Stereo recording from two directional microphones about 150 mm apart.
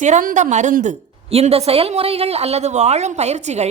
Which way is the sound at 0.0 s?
60° right (ahead or behind).